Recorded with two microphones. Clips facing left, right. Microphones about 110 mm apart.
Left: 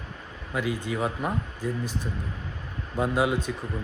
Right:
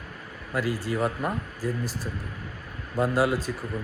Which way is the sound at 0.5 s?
5° right (ahead or behind).